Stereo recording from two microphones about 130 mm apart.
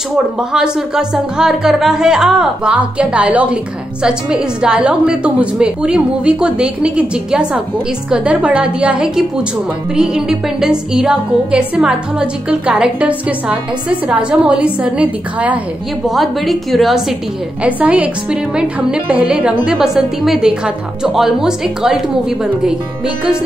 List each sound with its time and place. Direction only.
0.4 s a woman's voice: 5° right (ahead or behind)
16.1 s a woman's voice: centre (ahead or behind)
17.6 s a woman's voice: 10° right (ahead or behind)